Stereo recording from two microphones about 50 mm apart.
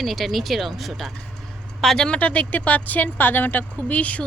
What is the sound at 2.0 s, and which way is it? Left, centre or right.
Speech, left.